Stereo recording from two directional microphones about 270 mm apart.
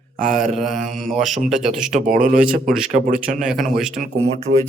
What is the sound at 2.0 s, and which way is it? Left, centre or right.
Speech, right.